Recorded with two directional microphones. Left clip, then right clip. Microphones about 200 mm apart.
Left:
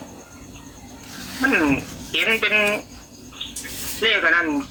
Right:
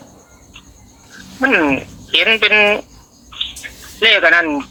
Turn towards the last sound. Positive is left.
turn(degrees=-55)  # may be behind; listen again after turning